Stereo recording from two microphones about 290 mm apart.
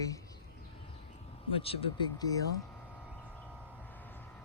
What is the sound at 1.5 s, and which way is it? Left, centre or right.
Speech, centre.